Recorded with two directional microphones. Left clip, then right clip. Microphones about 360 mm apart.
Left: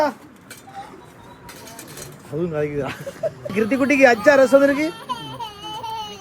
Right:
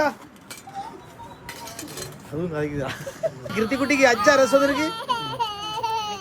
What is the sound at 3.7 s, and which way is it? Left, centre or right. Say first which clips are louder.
Speech: left 4 dB; centre.